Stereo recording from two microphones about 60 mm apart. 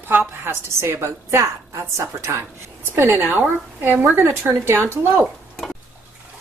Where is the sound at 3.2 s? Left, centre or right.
Right.